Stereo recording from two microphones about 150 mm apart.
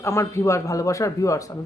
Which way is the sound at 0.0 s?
20° left (ahead or behind).